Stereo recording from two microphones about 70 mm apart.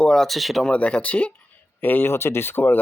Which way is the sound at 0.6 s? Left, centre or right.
Centre.